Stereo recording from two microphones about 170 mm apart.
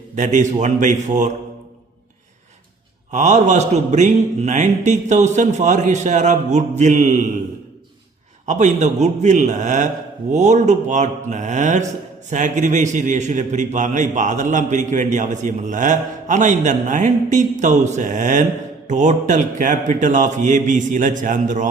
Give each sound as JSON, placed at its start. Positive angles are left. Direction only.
{"t": 0.2, "sound": "a man's voice", "side_deg": -45}
{"t": 3.1, "sound": "a man's voice", "side_deg": -45}
{"t": 8.4, "sound": "a man's voice", "side_deg": -45}